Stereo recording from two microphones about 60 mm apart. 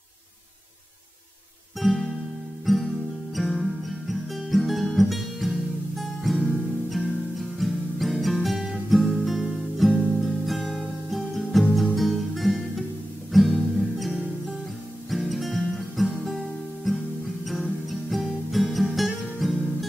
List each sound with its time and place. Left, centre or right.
1.8 s music: centre